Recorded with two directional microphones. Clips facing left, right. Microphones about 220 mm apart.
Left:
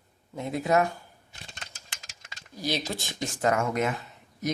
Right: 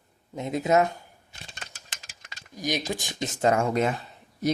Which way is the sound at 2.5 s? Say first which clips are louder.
Right 2 dB; 15° right (ahead or behind).